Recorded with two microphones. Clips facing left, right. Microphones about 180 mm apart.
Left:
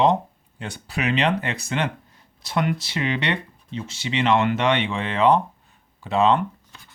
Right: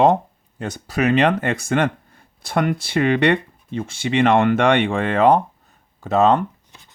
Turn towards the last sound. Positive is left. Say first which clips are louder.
# right 3 dB
turn(degrees=-45)  # may be behind; listen again after turning